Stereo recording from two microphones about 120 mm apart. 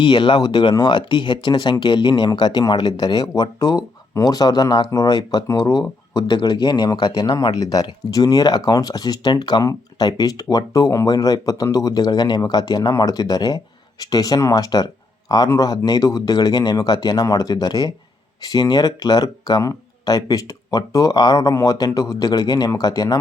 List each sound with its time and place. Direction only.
0.0 s speech: 45° left (ahead or behind)